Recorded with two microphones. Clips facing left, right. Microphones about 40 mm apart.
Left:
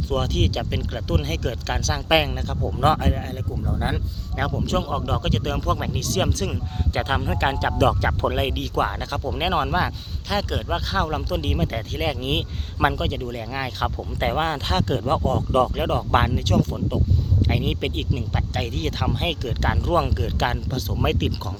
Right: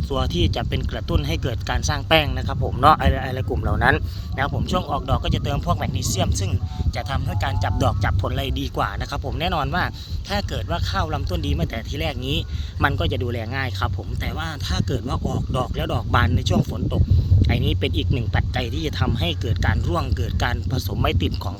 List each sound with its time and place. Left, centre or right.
0.1 s speech: centre
3.0 s speech: right
3.3 s speech: right
4.4 s a man's voice: centre
6.9 s speech: left
8.5 s a man's voice: centre
13.1 s speech: centre
13.5 s a man's voice: centre
14.2 s speech: left; by 18.6 s centre
18.6 s a man's voice: centre